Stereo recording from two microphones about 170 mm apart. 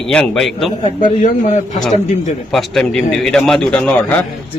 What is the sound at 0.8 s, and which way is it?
A man's voice, 45° left (ahead or behind).